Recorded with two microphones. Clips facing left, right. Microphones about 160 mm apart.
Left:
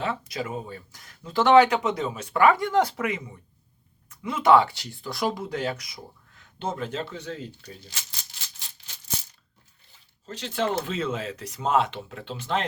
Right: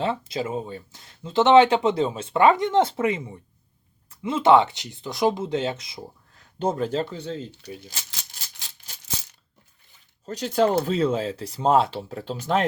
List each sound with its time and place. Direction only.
0.0 s speech: 25° right (ahead or behind)
6.6 s speech: 40° right (ahead or behind)
10.2 s speech: 45° right (ahead or behind)